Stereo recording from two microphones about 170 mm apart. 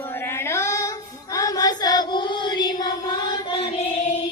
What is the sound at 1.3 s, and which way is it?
Chant, 20° left (ahead or behind).